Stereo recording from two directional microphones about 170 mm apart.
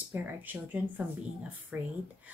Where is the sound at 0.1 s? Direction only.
10° right (ahead or behind).